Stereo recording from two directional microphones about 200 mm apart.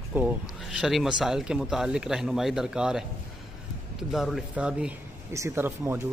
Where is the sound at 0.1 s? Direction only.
10° right (ahead or behind).